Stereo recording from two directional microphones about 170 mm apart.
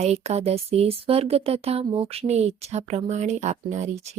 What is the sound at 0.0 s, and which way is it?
Speech, 40° right (ahead or behind).